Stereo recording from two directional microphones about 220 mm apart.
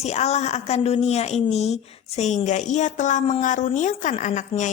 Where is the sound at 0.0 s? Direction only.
30° left (ahead or behind).